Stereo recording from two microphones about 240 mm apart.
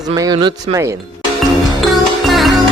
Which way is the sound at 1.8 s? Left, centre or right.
Centre.